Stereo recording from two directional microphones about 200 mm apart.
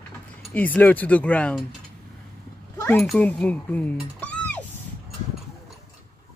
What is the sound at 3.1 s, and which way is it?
Speech, 5° left (ahead or behind).